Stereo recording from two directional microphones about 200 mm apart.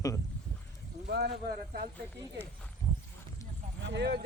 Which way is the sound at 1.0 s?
55° right (ahead or behind).